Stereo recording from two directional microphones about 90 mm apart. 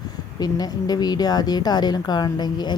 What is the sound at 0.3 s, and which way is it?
A woman's voice, 45° left (ahead or behind).